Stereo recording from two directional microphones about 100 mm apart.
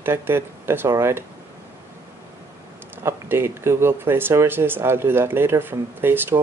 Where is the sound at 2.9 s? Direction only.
25° right (ahead or behind).